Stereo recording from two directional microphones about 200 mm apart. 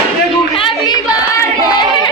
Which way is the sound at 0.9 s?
20° left (ahead or behind).